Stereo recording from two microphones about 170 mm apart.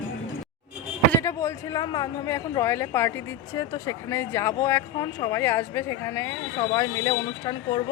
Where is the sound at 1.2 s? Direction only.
15° left (ahead or behind).